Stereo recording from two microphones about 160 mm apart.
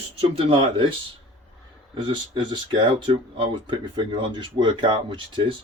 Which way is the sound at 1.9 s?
30° right (ahead or behind).